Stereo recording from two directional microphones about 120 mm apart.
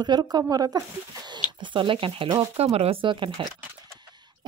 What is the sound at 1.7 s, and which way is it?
Speech, 45° right (ahead or behind).